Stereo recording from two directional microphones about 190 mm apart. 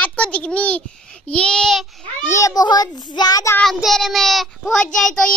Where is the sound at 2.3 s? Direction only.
20° left (ahead or behind).